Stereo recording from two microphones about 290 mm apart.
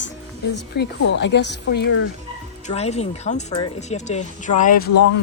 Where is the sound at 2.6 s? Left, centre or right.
Left.